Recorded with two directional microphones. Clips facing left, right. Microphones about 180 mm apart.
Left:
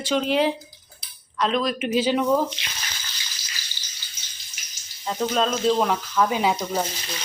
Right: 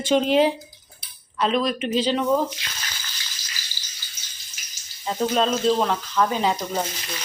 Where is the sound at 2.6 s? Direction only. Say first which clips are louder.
Even; 25° left (ahead or behind).